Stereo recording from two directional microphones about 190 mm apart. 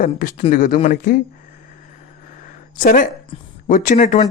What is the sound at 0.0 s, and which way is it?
Speech, 45° left (ahead or behind).